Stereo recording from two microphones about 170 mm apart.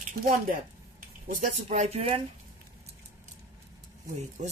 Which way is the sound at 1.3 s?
45° right (ahead or behind).